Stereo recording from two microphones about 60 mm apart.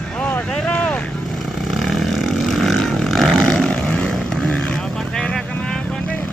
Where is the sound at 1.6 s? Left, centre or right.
Centre.